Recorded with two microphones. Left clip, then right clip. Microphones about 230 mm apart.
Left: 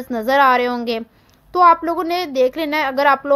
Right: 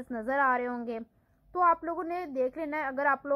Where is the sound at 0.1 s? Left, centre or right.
Left.